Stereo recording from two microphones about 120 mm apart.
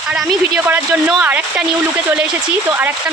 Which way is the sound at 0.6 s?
15° right (ahead or behind).